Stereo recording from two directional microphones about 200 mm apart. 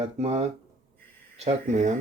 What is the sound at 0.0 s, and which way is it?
Speech, 30° right (ahead or behind).